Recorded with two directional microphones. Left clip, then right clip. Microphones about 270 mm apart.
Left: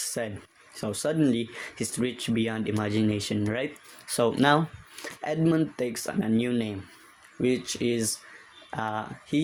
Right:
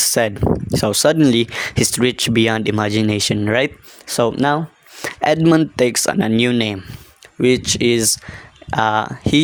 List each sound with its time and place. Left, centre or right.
0.0 s speech: right
5.0 s speech: right